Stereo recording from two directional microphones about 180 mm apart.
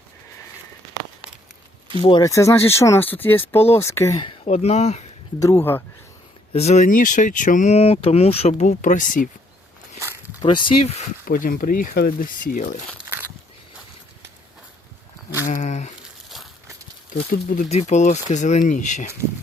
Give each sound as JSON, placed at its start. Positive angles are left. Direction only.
{"t": 2.0, "sound": "speech", "side_deg": 20}
{"t": 4.4, "sound": "speech", "side_deg": 35}
{"t": 5.4, "sound": "speech", "side_deg": 15}
{"t": 6.5, "sound": "speech", "side_deg": 35}
{"t": 10.4, "sound": "speech", "side_deg": 30}
{"t": 11.3, "sound": "speech", "side_deg": 50}
{"t": 13.1, "sound": "walk", "side_deg": -15}
{"t": 15.4, "sound": "a sound", "side_deg": 45}
{"t": 17.1, "sound": "speech", "side_deg": 55}
{"t": 17.7, "sound": "speech", "side_deg": 40}